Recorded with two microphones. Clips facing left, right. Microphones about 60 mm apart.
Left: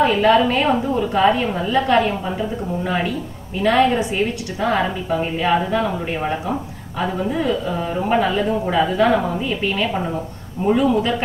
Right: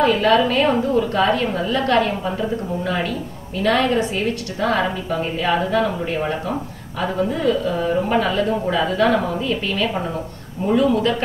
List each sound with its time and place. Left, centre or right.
0.0 s a woman's voice: centre
7.0 s a woman's voice: centre